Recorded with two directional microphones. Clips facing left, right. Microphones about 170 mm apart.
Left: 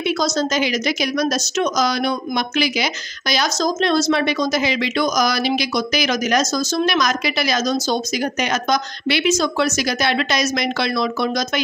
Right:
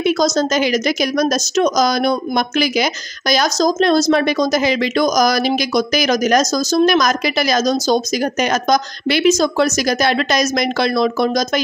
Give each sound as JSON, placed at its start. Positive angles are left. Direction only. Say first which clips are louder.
{"t": 0.0, "sound": "a woman's voice", "louder": "right 4 dB", "side_deg": -45}